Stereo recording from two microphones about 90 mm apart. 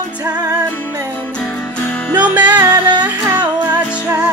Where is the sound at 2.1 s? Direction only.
15° right (ahead or behind).